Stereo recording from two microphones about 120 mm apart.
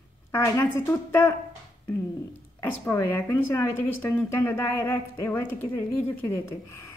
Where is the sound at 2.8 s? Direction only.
20° left (ahead or behind).